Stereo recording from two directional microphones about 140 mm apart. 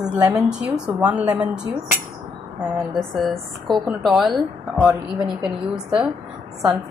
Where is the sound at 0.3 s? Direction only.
5° right (ahead or behind).